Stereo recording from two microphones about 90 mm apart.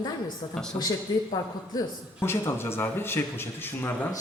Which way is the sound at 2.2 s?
25° left (ahead or behind).